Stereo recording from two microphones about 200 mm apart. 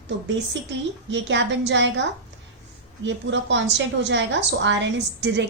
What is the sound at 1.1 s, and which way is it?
A woman's voice, 65° right (ahead or behind).